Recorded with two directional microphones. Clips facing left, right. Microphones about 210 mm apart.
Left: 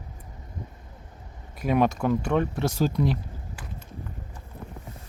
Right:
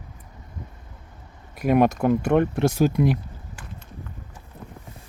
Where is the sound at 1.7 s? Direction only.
55° right (ahead or behind).